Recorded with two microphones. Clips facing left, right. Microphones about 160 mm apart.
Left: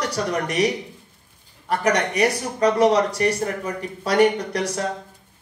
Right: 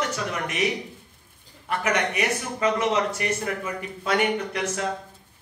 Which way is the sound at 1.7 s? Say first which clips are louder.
Left 4 dB; 40° left (ahead or behind).